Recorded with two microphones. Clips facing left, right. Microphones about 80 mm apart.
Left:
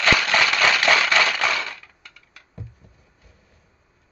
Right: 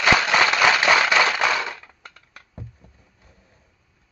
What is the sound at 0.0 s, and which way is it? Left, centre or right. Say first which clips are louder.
Tap: right 2 dB; centre.